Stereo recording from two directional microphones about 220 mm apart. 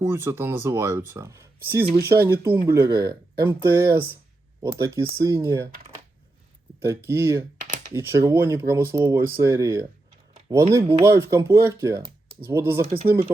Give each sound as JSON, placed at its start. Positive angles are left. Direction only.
{"t": 0.0, "sound": "speech", "side_deg": -10}
{"t": 6.8, "sound": "speech", "side_deg": -10}
{"t": 12.8, "sound": "speech", "side_deg": -25}
{"t": 13.1, "sound": "speech", "side_deg": -10}